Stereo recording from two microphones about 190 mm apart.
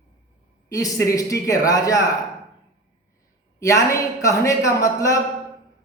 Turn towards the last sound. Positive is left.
turn(degrees=15)  # may be behind; listen again after turning